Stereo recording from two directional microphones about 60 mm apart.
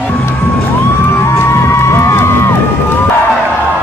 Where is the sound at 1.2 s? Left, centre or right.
Left.